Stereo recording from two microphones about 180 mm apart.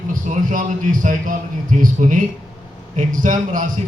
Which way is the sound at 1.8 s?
50° right (ahead or behind).